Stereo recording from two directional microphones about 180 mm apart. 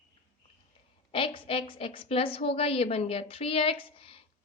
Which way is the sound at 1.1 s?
30° left (ahead or behind).